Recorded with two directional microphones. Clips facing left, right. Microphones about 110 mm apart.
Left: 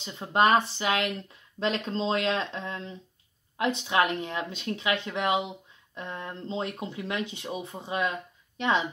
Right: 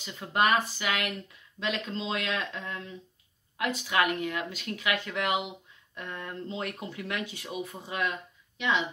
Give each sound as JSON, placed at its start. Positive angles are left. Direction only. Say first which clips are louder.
{"t": 0.0, "sound": "speech", "louder": "left 3 dB", "side_deg": 25}
{"t": 8.5, "sound": "speech", "louder": "left 3 dB", "side_deg": 35}